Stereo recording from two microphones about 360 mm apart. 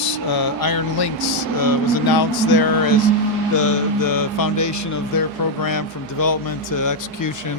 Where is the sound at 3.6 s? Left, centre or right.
Left.